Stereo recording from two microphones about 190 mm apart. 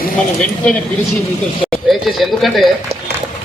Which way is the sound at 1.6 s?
5° left (ahead or behind).